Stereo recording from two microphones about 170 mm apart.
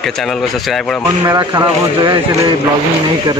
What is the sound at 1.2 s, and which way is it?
Speech, 25° right (ahead or behind).